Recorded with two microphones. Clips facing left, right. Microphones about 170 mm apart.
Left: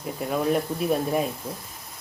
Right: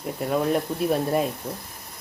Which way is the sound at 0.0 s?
Centre (ahead or behind).